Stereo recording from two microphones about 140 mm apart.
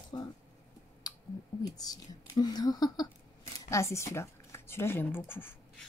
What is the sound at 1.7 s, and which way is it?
A woman's voice, 25° left (ahead or behind).